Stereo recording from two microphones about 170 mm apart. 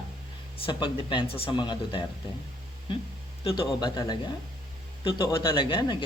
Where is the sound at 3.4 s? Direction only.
30° left (ahead or behind).